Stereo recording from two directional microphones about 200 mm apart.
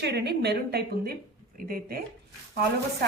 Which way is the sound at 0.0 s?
55° right (ahead or behind).